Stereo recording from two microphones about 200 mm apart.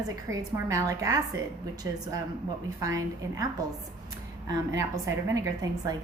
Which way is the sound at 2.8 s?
15° right (ahead or behind).